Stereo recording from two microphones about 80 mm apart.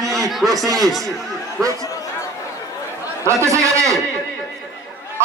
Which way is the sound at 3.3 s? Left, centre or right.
Right.